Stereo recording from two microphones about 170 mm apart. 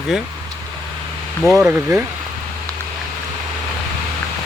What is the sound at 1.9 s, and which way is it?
Speech, 20° right (ahead or behind).